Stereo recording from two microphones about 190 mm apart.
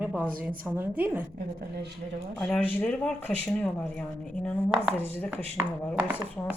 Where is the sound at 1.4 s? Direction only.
55° right (ahead or behind).